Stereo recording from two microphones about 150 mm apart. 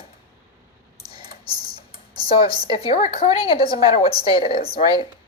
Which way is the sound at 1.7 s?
35° left (ahead or behind).